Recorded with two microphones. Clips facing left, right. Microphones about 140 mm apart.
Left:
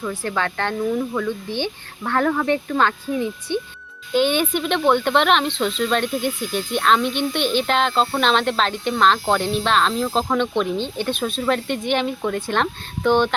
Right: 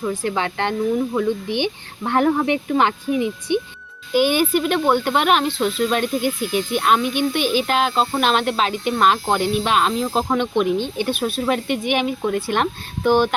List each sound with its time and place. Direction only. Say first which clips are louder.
0.0 s speech: right 2 dB; 15° right (ahead or behind)